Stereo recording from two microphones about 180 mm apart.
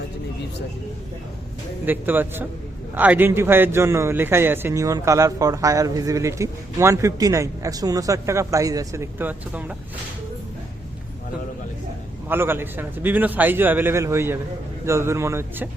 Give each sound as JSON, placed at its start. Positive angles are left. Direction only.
{"t": 1.8, "sound": "a man's voice", "side_deg": -10}
{"t": 12.3, "sound": "a man's voice", "side_deg": -10}